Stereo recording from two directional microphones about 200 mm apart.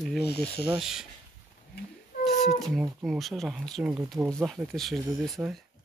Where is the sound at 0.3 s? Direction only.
55° left (ahead or behind).